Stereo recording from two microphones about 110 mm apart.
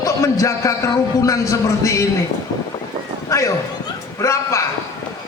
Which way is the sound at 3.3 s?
25° left (ahead or behind).